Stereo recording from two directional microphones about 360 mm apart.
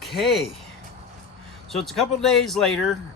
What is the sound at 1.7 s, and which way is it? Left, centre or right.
Speech, centre.